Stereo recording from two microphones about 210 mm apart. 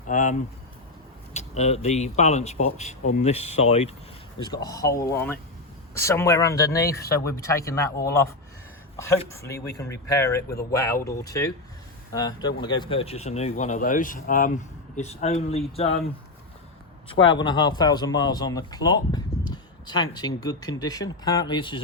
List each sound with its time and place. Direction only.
0.1 s a man's voice: 35° left (ahead or behind)
4.4 s speech: 20° left (ahead or behind)
17.1 s a man's voice: 25° left (ahead or behind)